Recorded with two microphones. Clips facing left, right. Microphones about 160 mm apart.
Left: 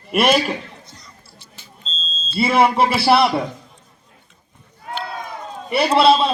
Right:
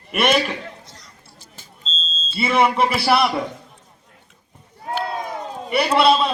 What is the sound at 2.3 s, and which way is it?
Speech, 35° left (ahead or behind).